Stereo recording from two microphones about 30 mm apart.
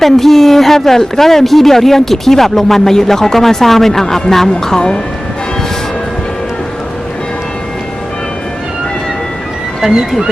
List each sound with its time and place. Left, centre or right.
0.0 s speech: centre
9.8 s speech: centre